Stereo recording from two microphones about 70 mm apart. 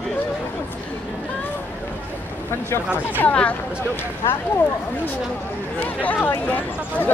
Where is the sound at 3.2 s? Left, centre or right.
Centre.